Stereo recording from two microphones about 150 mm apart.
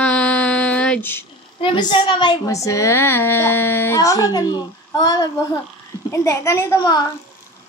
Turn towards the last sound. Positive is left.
turn(degrees=20)  # may be behind; listen again after turning